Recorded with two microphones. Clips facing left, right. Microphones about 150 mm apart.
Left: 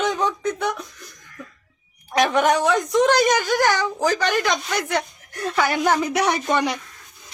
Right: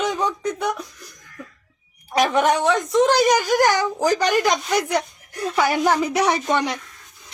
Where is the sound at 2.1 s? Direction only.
Centre (ahead or behind).